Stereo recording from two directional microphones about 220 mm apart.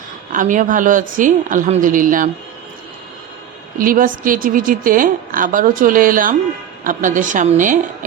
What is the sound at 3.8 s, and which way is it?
A woman's voice, 40° right (ahead or behind).